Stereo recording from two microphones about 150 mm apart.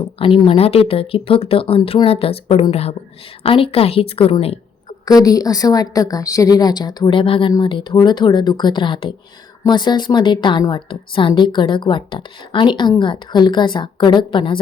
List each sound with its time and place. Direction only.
0.2 s a woman's voice: 35° left (ahead or behind)
5.0 s a woman's voice: 25° left (ahead or behind)